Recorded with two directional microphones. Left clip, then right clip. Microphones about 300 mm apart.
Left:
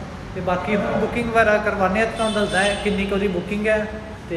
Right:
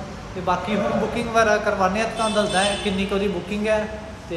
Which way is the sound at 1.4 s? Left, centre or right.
Centre.